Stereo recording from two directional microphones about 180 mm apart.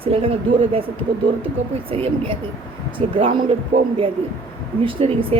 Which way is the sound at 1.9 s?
35° right (ahead or behind).